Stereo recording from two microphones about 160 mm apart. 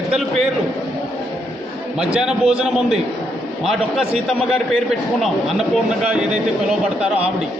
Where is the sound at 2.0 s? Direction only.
5° right (ahead or behind).